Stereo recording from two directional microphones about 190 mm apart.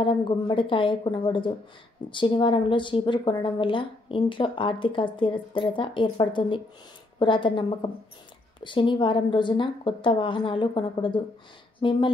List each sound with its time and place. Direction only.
0.0 s speech: 25° left (ahead or behind)